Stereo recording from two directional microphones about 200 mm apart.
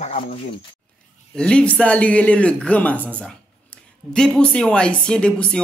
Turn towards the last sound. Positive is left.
turn(degrees=5)  # may be behind; listen again after turning